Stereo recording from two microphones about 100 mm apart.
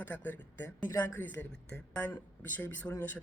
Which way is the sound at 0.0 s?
20° left (ahead or behind).